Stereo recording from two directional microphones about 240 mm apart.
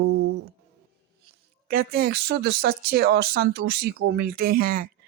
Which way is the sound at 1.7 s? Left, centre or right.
Right.